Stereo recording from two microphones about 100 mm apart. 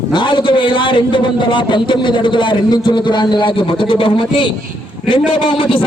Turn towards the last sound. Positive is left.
turn(degrees=60)  # may be behind; listen again after turning